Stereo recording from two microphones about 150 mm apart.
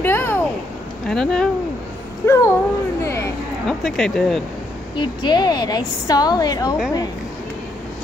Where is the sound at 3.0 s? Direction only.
20° left (ahead or behind).